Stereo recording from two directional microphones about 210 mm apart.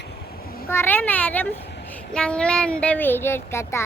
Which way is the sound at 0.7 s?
10° left (ahead or behind).